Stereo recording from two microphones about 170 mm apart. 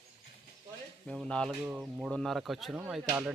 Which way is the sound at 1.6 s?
10° right (ahead or behind).